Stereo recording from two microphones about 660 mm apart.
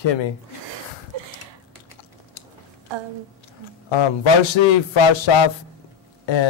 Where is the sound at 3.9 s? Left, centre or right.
Left.